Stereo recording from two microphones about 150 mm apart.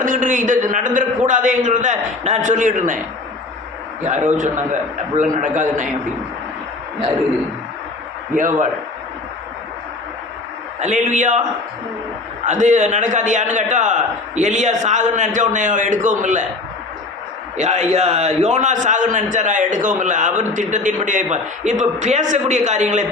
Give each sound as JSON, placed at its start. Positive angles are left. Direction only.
{"t": 0.0, "sound": "a man's voice", "side_deg": -60}
{"t": 4.4, "sound": "a man's voice", "side_deg": -55}
{"t": 8.3, "sound": "a man's voice", "side_deg": -60}
{"t": 10.8, "sound": "a man's voice", "side_deg": -55}
{"t": 12.5, "sound": "a man's voice", "side_deg": -55}
{"t": 17.6, "sound": "a man's voice", "side_deg": -50}